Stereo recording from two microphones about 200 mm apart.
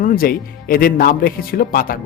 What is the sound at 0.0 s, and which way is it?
Speech, 45° left (ahead or behind).